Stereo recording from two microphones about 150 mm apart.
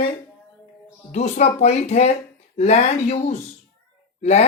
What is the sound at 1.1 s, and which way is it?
A man's voice, 50° left (ahead or behind).